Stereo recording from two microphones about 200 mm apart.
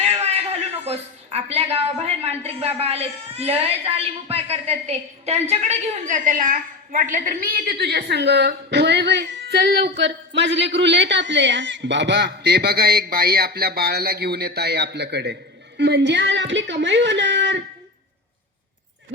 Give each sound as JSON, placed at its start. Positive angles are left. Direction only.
{"t": 0.0, "sound": "a woman's voice", "side_deg": -30}